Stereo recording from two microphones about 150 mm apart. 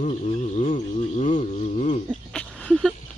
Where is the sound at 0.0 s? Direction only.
50° left (ahead or behind).